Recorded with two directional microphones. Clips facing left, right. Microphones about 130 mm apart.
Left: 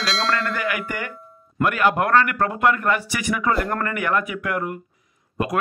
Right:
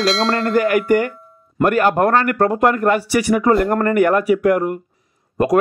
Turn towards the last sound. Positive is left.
turn(degrees=-40)  # may be behind; listen again after turning